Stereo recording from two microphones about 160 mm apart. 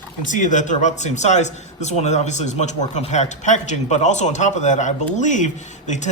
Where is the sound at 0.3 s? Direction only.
50° left (ahead or behind).